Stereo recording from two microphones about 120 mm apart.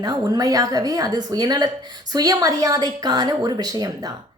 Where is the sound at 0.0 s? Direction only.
35° right (ahead or behind).